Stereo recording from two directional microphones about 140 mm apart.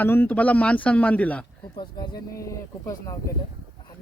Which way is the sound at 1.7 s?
35° left (ahead or behind).